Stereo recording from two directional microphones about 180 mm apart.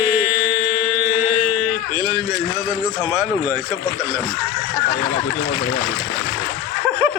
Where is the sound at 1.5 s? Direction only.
5° left (ahead or behind).